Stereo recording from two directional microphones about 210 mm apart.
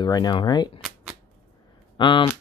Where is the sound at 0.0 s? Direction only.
20° left (ahead or behind).